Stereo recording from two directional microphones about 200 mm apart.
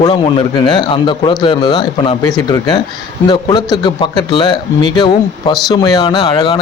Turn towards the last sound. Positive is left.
turn(degrees=20)  # may be behind; listen again after turning